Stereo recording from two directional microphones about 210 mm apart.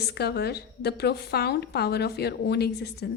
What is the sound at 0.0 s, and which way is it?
A woman's voice, 50° left (ahead or behind).